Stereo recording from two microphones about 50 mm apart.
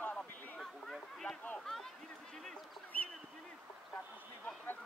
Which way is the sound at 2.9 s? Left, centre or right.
Left.